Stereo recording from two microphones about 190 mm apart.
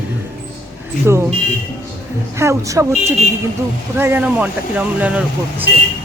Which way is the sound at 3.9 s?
10° right (ahead or behind).